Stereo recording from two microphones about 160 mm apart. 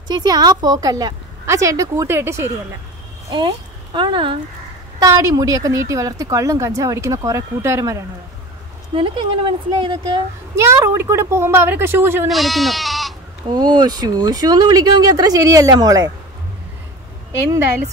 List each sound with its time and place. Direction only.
0.1 s speech: 25° right (ahead or behind)
3.3 s speech: 30° right (ahead or behind)
5.1 s speech: 20° right (ahead or behind)
8.9 s speech: 30° right (ahead or behind)
10.5 s speech: 15° right (ahead or behind)
12.3 s speech: centre (ahead or behind)
13.5 s speech: 25° right (ahead or behind)